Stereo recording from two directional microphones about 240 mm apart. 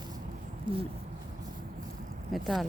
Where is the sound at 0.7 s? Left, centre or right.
Centre.